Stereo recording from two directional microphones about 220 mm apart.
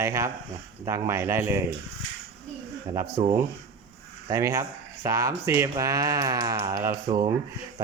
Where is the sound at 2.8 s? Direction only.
15° right (ahead or behind).